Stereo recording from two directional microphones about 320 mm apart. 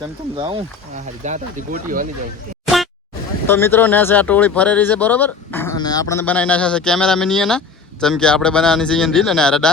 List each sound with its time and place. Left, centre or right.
0.3 s speech: centre
2.6 s a sound: centre
3.4 s speech: centre